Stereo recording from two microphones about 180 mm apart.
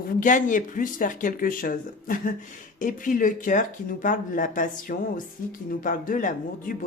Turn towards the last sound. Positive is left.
turn(degrees=50)  # may be behind; listen again after turning